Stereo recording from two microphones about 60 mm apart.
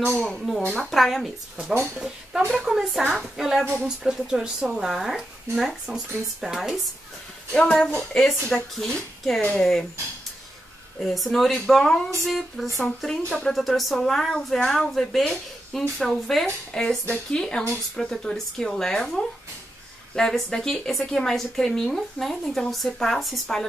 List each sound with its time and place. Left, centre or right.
0.2 s a woman's voice: centre
7.5 s a woman's voice: centre
11.0 s a woman's voice: centre